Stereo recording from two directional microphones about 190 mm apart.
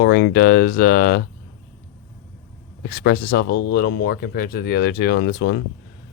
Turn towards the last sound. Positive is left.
turn(degrees=60)  # may be behind; listen again after turning